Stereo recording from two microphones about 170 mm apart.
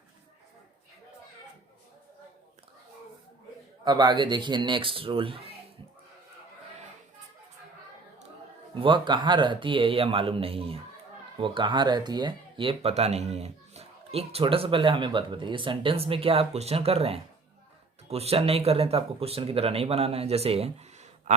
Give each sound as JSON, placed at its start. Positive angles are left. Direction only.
{"t": 3.8, "sound": "a man's voice", "side_deg": -25}
{"t": 8.7, "sound": "speech", "side_deg": -30}